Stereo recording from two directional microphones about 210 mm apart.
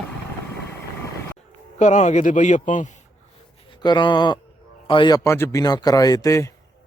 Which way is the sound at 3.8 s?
20° left (ahead or behind).